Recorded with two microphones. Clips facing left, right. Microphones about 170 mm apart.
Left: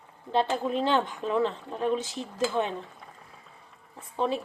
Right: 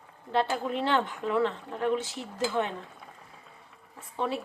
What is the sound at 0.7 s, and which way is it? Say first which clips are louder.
Speech: left 2 dB; 20° left (ahead or behind).